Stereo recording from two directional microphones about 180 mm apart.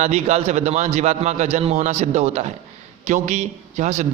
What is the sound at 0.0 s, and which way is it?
A man's voice, 40° right (ahead or behind).